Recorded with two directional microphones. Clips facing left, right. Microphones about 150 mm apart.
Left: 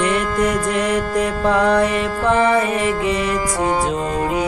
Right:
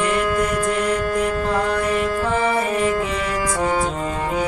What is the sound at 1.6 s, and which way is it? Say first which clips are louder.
Music: left 6 dB; 90° left.